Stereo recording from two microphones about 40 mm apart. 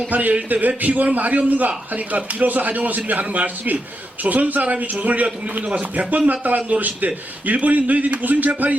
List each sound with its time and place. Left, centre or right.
0.1 s a man's voice: right